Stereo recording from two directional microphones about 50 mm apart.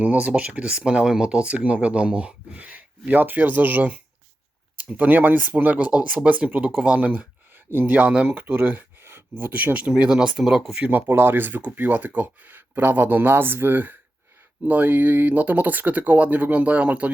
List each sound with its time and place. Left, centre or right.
0.0 s speech: right
7.7 s speech: right
8.1 s speech: right
8.4 s speech: right
9.0 s speech: right
10.0 s speech: centre
11.1 s speech: right